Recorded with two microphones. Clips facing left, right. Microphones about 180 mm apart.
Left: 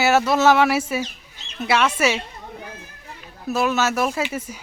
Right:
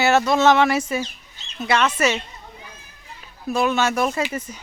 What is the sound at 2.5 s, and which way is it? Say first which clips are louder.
Children playing: left 7 dB; 60° left (ahead or behind).